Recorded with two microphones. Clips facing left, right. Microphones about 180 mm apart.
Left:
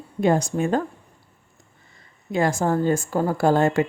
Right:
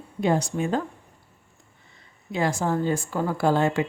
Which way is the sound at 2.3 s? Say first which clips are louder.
Left 3 dB; 45° left (ahead or behind).